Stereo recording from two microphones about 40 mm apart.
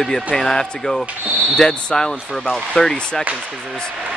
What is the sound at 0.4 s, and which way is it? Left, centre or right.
Speech, centre.